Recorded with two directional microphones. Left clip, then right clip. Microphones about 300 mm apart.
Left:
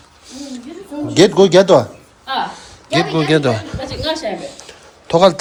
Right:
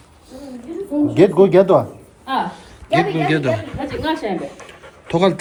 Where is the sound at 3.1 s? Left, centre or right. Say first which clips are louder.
Left 3 dB; centre.